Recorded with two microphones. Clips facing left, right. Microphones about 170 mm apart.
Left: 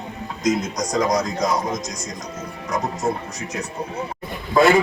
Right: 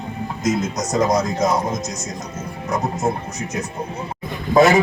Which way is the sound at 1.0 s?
25° right (ahead or behind).